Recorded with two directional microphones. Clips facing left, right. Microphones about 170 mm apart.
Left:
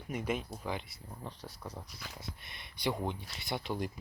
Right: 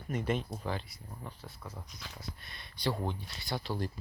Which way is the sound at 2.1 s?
20° left (ahead or behind).